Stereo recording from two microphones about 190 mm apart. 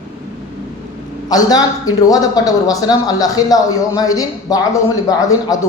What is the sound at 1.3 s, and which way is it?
A man's voice, 20° left (ahead or behind).